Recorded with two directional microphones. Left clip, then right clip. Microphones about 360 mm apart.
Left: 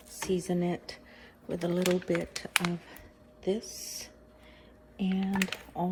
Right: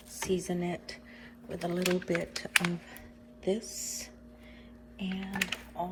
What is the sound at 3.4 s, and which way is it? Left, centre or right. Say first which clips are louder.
A woman's voice: even; centre.